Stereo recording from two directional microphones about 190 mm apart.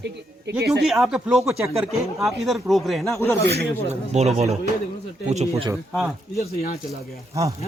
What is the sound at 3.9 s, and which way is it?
A man's voice, 35° right (ahead or behind).